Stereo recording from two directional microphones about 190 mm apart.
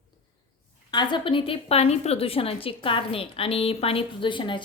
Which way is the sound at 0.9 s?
25° left (ahead or behind).